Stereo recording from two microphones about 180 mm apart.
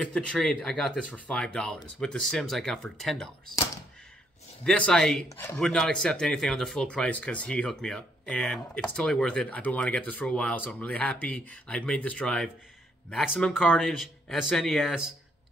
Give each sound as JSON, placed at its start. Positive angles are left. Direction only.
{"t": 0.0, "sound": "speech", "side_deg": 5}
{"t": 4.6, "sound": "speech", "side_deg": 5}
{"t": 5.3, "sound": "speech", "side_deg": 15}
{"t": 5.6, "sound": "speech", "side_deg": 5}